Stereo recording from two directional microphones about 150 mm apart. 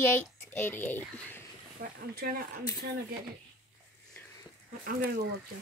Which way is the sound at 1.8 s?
90° right.